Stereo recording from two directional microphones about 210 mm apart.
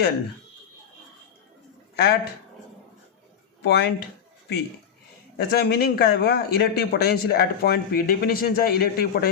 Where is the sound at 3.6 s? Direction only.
55° left (ahead or behind).